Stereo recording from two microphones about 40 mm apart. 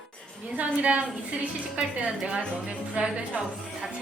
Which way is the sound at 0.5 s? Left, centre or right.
Right.